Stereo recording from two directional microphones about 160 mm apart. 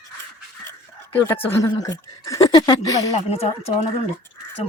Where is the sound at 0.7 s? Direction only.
10° left (ahead or behind).